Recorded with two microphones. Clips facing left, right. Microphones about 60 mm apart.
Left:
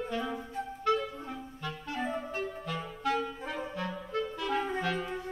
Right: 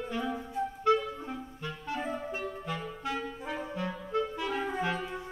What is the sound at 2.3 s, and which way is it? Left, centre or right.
Clarinet, right.